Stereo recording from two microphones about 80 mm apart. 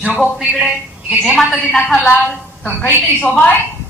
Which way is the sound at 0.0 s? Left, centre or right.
Centre.